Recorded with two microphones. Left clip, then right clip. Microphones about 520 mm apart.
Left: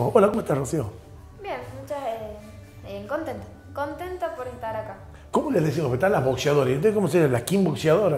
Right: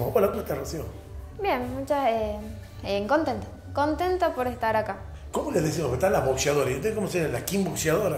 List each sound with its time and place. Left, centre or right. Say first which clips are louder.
0.1 s speech: left 5 dB; left
1.4 s a woman's voice: right 6 dB; right
5.3 s speech: left 3 dB; left
7.7 s speech: left 5 dB; left